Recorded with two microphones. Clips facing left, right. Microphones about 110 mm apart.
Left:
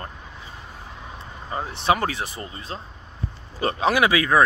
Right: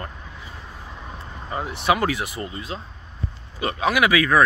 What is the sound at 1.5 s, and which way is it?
Speech, 25° left (ahead or behind).